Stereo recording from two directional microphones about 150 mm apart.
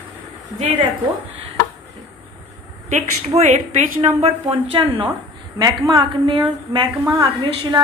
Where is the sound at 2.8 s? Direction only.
45° right (ahead or behind).